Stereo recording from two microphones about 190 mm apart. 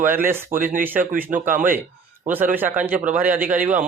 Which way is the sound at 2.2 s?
10° right (ahead or behind).